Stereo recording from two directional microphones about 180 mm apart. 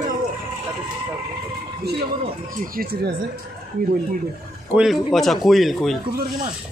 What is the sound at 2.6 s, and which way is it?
Speech, 55° right (ahead or behind).